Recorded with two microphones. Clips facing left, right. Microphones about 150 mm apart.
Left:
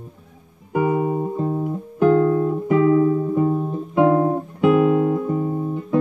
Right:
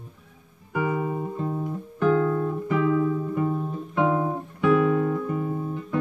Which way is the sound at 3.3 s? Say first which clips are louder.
Left 6 dB; 35° left (ahead or behind).